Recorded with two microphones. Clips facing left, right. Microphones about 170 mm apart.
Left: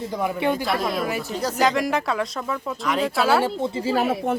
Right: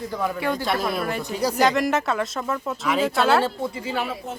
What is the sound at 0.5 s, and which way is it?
Speech, centre (ahead or behind).